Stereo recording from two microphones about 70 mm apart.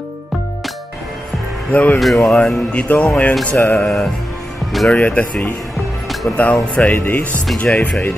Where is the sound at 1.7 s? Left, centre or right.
Centre.